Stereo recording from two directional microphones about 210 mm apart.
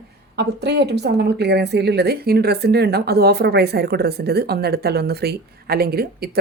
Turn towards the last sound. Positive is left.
turn(degrees=-50)  # may be behind; listen again after turning